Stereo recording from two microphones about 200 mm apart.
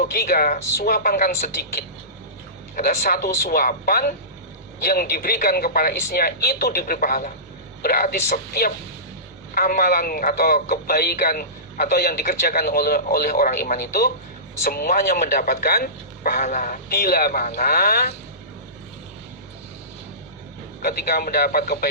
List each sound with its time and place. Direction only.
0.1 s speech: 50° left (ahead or behind)
2.7 s speech: 45° left (ahead or behind)
20.8 s speech: 45° left (ahead or behind)